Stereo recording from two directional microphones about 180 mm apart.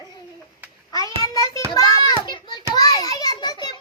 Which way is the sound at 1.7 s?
20° left (ahead or behind).